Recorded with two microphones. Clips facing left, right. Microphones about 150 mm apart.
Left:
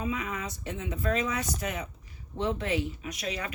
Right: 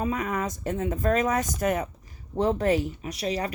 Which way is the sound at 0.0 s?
45° right (ahead or behind).